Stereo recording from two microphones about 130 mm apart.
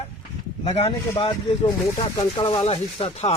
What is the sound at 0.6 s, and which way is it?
Speech, 55° left (ahead or behind).